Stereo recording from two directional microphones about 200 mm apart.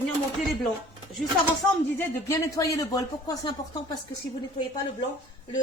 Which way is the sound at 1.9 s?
10° left (ahead or behind).